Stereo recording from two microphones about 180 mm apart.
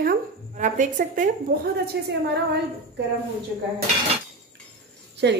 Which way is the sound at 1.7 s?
65° right (ahead or behind).